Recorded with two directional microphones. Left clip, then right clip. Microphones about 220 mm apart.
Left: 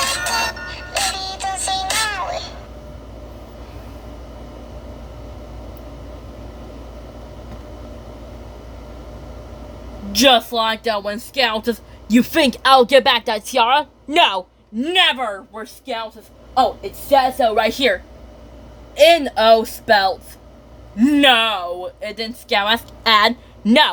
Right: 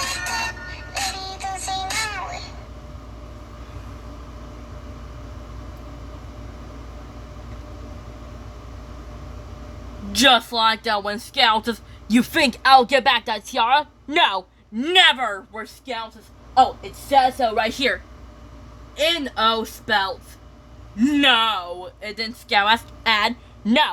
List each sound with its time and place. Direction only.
0.0 s music: 45° left (ahead or behind)
10.1 s speech: 5° right (ahead or behind)
14.8 s speech: 10° right (ahead or behind)
17.1 s speech: centre (ahead or behind)
18.9 s speech: 5° left (ahead or behind)
23.0 s a woman's voice: 10° left (ahead or behind)